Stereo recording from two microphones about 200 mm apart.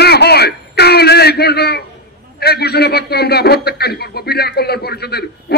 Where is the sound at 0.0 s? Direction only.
55° left (ahead or behind).